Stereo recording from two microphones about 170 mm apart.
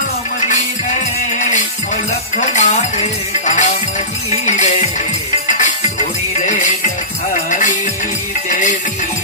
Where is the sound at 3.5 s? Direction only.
45° left (ahead or behind).